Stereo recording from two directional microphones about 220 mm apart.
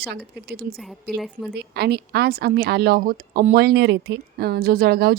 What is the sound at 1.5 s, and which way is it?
A woman's voice, 50° right (ahead or behind).